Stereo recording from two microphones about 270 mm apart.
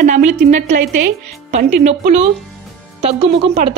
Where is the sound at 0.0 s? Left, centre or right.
Right.